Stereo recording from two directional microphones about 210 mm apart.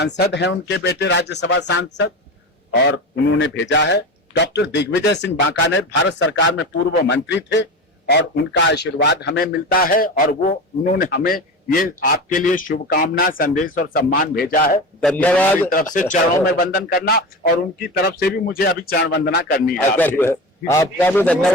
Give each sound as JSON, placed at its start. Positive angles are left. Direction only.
{"t": 0.0, "sound": "a man's voice", "side_deg": 55}
{"t": 15.0, "sound": "a man's voice", "side_deg": 5}
{"t": 15.7, "sound": "a man's voice", "side_deg": 40}
{"t": 19.7, "sound": "a man's voice", "side_deg": 10}